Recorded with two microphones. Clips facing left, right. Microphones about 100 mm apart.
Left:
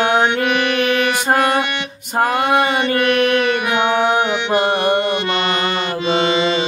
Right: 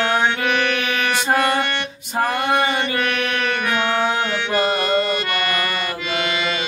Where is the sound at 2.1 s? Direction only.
55° left (ahead or behind).